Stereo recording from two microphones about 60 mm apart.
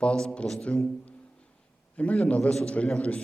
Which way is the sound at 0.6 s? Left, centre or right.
Centre.